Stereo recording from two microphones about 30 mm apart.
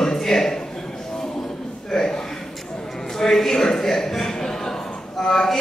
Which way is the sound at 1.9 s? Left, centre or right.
Left.